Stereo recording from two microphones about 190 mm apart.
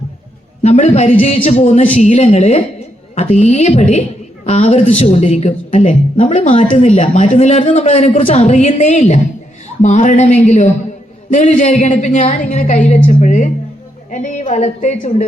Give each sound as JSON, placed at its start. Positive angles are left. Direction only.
{"t": 0.6, "sound": "a woman's voice", "side_deg": 35}